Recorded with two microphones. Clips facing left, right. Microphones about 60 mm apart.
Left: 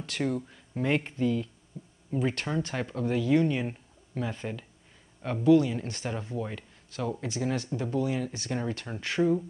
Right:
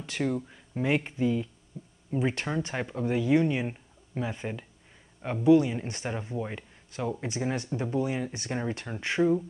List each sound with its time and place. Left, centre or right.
0.0 s speech: centre